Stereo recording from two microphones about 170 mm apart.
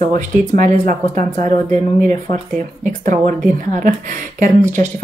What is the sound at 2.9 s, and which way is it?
Speech, 50° right (ahead or behind).